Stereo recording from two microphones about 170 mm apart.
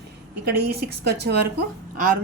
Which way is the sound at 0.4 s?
75° right (ahead or behind).